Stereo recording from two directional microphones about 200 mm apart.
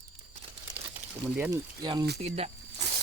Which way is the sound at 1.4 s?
20° right (ahead or behind).